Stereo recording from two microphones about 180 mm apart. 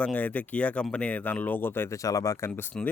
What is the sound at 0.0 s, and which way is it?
Speech, 10° left (ahead or behind).